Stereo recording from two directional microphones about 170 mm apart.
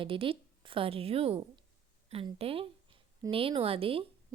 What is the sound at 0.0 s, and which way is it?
Speech, 30° right (ahead or behind).